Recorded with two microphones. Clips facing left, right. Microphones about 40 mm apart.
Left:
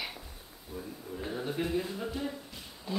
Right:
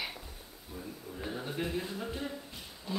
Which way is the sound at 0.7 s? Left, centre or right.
Centre.